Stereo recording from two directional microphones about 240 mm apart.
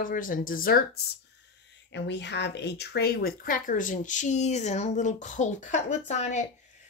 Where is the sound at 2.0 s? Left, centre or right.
Left.